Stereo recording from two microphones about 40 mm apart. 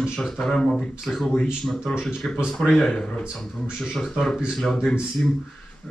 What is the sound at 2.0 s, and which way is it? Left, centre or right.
Speech, centre.